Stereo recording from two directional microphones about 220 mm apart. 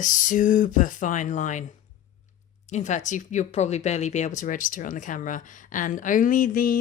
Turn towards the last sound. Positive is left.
turn(degrees=40)  # may be behind; listen again after turning